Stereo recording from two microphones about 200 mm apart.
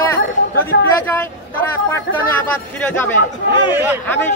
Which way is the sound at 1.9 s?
10° left (ahead or behind).